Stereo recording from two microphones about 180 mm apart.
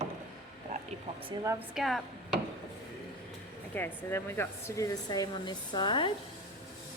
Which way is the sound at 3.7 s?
10° left (ahead or behind).